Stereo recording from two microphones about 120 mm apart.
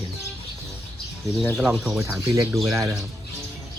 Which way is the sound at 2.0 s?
25° right (ahead or behind).